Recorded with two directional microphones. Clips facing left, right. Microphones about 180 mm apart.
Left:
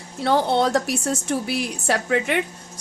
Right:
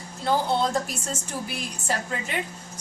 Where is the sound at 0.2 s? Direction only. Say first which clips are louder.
Left 4 dB; 75° left (ahead or behind).